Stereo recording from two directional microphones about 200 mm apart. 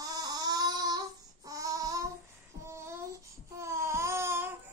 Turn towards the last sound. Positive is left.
turn(degrees=-15)  # may be behind; listen again after turning